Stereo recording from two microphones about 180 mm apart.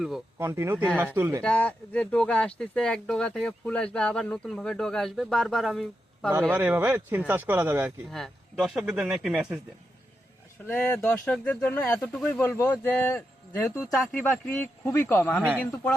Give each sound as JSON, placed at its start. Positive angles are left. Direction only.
{"t": 0.3, "sound": "speech", "side_deg": -15}
{"t": 1.4, "sound": "speech", "side_deg": 5}
{"t": 6.5, "sound": "speech", "side_deg": -10}
{"t": 8.1, "sound": "speech", "side_deg": 0}
{"t": 10.7, "sound": "speech", "side_deg": 10}
{"t": 15.4, "sound": "speech", "side_deg": -10}